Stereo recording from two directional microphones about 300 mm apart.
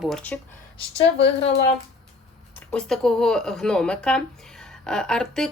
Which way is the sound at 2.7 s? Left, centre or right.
Centre.